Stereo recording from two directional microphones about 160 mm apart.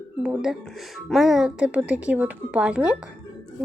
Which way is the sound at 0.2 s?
5° right (ahead or behind).